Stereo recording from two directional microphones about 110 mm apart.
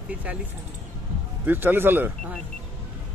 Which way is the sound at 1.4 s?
20° right (ahead or behind).